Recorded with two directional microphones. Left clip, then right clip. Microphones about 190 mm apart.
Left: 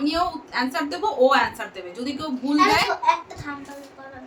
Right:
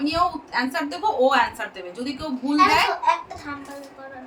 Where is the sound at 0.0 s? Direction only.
5° right (ahead or behind).